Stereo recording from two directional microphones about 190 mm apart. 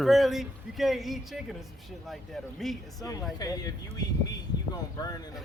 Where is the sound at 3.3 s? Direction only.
20° left (ahead or behind).